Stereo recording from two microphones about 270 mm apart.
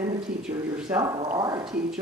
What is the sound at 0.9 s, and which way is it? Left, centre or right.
Speech, centre.